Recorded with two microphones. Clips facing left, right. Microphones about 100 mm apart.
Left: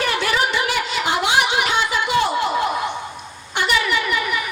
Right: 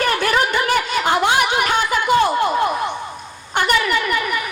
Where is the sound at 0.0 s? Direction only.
45° right (ahead or behind).